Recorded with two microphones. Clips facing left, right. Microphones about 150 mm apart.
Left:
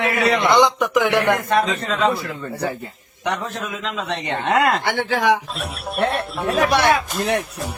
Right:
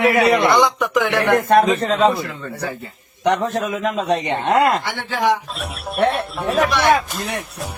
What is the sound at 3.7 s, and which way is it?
Speech, 50° right (ahead or behind).